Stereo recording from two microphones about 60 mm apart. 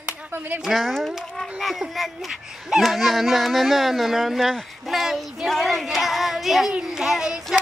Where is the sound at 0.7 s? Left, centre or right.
Centre.